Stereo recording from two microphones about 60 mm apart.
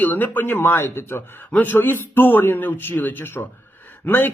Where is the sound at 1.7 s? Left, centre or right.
Left.